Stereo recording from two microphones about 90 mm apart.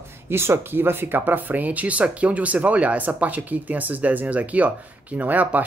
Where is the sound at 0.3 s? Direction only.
30° right (ahead or behind).